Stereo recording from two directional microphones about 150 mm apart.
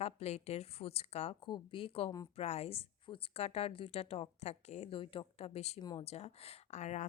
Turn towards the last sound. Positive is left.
turn(degrees=50)  # may be behind; listen again after turning